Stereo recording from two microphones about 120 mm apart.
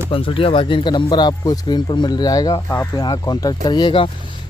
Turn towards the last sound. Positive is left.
turn(degrees=40)  # may be behind; listen again after turning